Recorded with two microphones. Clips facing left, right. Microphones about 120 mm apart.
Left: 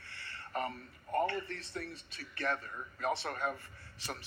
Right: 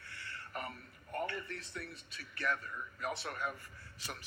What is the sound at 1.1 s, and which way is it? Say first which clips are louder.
Speech: left 6 dB; 30° left (ahead or behind).